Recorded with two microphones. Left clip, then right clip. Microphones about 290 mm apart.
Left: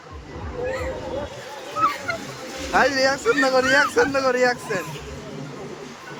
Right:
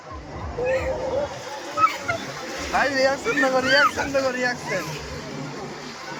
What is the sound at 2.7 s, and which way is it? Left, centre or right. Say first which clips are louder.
Speech: left 2 dB; centre.